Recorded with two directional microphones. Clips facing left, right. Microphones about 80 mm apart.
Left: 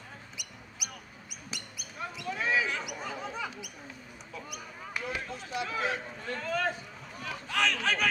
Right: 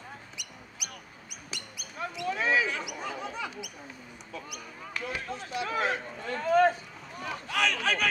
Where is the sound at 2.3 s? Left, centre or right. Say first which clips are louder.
Right 2 dB; right.